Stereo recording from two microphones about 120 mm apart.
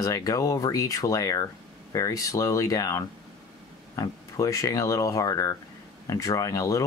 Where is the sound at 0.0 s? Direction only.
30° left (ahead or behind).